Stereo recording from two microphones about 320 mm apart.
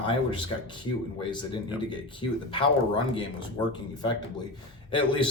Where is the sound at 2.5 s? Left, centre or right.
Centre.